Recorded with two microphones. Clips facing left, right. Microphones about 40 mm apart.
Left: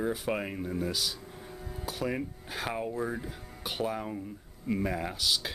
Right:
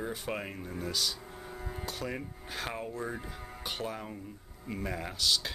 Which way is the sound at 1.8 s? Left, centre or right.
Centre.